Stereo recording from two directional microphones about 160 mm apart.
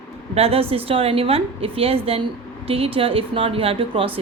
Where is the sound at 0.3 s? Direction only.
40° right (ahead or behind).